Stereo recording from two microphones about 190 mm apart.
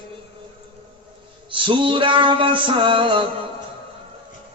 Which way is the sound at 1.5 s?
25° right (ahead or behind).